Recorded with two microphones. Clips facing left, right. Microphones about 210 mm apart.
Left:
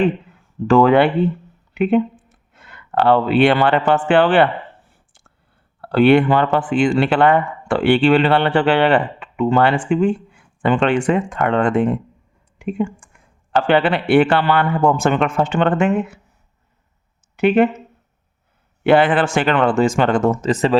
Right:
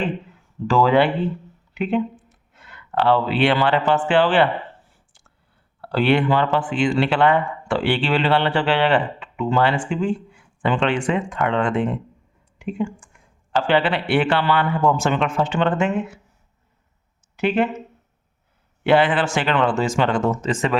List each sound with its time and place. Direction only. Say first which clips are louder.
0.7 s speech: left 4 dB; 60° left (ahead or behind)
5.9 s speech: left 6 dB; 50° left (ahead or behind)
17.3 s speech: left 6 dB; 55° left (ahead or behind)
18.8 s speech: left 3 dB; 50° left (ahead or behind); by 20.7 s 35° left (ahead or behind)